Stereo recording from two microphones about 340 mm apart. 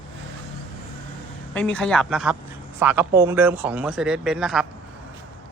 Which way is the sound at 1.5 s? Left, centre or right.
Centre.